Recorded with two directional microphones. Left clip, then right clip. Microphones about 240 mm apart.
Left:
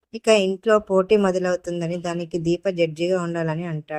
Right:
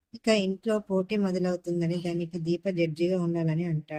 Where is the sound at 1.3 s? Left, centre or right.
Left.